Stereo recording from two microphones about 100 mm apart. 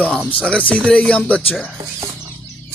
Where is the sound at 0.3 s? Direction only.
15° left (ahead or behind).